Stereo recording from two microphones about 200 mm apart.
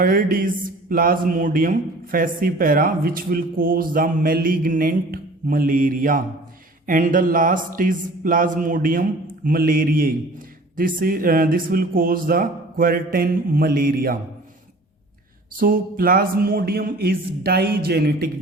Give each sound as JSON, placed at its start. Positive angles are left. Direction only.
{"t": 0.0, "sound": "speech", "side_deg": -45}
{"t": 15.5, "sound": "speech", "side_deg": -45}